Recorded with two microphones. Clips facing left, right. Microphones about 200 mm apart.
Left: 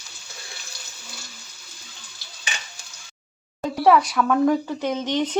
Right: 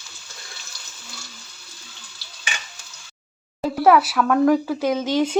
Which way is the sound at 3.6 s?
5° right (ahead or behind).